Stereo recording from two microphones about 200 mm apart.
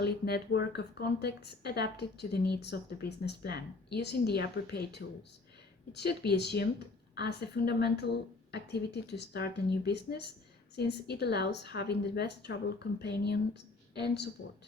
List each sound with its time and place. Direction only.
0.0 s a woman's voice: 55° left (ahead or behind)